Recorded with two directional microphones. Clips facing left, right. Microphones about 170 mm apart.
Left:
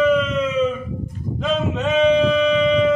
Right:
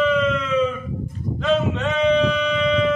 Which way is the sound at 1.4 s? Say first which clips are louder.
Right 1 dB; 10° left (ahead or behind).